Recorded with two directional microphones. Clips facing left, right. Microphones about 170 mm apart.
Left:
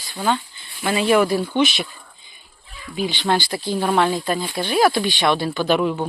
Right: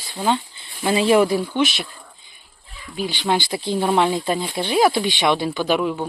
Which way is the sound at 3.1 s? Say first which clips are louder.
Right 1 dB; 10° right (ahead or behind).